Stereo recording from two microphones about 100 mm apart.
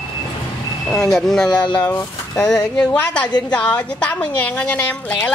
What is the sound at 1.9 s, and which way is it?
Speech, 25° left (ahead or behind).